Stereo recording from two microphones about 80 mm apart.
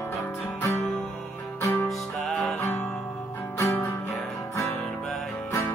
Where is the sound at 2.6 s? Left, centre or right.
Left.